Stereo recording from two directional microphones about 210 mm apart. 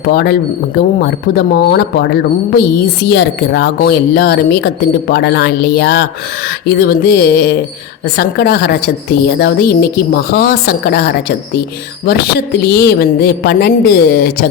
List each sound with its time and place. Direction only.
0.1 s speech: 50° left (ahead or behind)
12.6 s speech: 50° left (ahead or behind)